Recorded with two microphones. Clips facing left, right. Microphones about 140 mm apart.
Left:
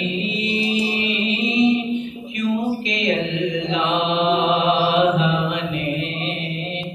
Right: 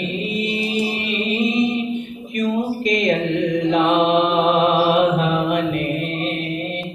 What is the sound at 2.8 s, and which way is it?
Mantra, 50° right (ahead or behind).